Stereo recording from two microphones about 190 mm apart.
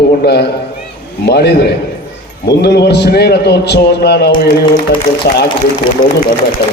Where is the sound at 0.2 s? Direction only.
60° left (ahead or behind).